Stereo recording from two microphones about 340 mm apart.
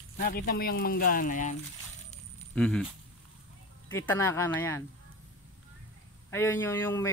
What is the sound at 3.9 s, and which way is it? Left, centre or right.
Speech, centre.